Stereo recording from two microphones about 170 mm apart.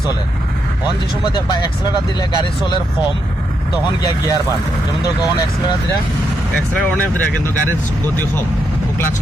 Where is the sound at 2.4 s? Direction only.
25° left (ahead or behind).